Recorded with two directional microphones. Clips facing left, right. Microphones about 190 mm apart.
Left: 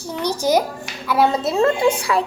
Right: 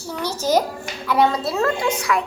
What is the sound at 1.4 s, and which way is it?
Speech, 25° left (ahead or behind).